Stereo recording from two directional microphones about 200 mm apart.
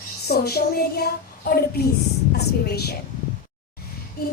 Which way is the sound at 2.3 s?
50° left (ahead or behind).